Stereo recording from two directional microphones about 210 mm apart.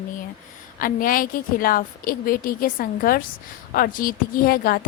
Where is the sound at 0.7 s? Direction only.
40° left (ahead or behind).